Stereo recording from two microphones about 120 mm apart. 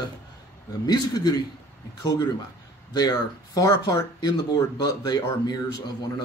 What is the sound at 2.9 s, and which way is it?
Speech, 35° left (ahead or behind).